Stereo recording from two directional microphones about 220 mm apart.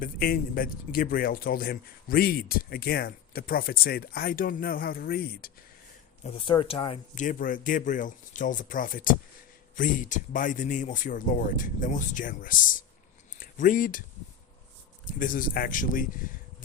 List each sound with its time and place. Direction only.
0.0 s a man's voice: 40° left (ahead or behind)
6.2 s speech: 25° left (ahead or behind)
7.3 s a man's voice: 40° left (ahead or behind)
15.0 s a man's voice: 40° left (ahead or behind)